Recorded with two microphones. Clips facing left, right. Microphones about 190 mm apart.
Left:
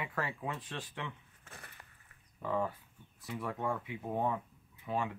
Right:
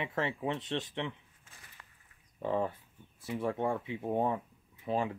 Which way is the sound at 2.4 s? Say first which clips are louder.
Right 3 dB; 30° right (ahead or behind).